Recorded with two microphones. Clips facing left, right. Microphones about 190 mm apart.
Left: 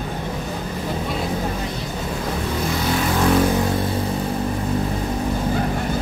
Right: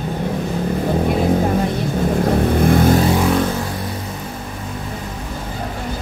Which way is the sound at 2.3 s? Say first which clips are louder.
Right 9 dB; 55° right (ahead or behind).